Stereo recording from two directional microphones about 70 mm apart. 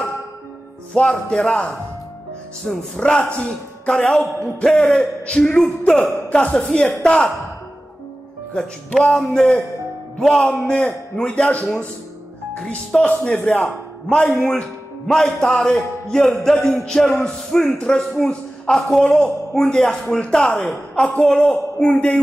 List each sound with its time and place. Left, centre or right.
0.9 s a man's voice: centre
5.6 s speech: centre
6.2 s a man's voice: centre
8.9 s a man's voice: centre
13.7 s a man's voice: centre